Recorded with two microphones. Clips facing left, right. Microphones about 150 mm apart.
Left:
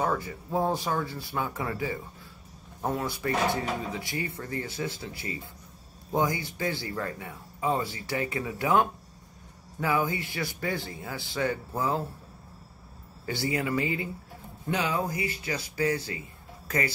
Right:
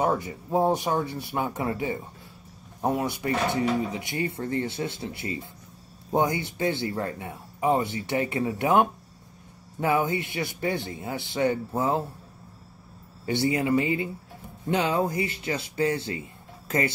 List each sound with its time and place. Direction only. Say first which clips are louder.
0.0 s speech: right 3 dB; 20° right (ahead or behind)
13.2 s speech: right 5 dB; 20° right (ahead or behind)